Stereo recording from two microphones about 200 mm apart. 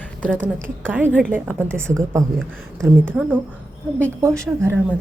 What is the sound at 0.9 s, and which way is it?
A woman's voice, 10° right (ahead or behind).